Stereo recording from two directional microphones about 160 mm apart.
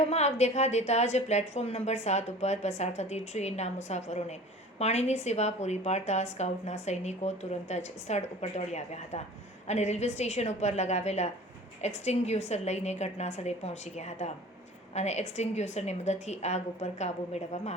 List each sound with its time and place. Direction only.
0.1 s a woman's voice: 45° left (ahead or behind)